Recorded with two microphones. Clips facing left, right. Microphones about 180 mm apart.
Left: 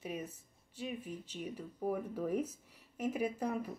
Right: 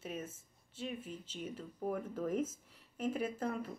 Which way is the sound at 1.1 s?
15° left (ahead or behind).